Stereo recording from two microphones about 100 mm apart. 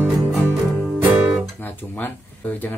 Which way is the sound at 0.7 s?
10° right (ahead or behind).